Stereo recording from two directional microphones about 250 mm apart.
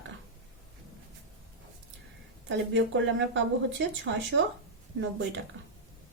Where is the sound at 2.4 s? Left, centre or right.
Right.